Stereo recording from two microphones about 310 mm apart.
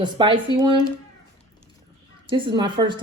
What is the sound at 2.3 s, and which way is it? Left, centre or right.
Speech, centre.